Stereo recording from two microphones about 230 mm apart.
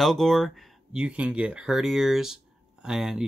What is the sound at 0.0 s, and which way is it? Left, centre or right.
Speech, centre.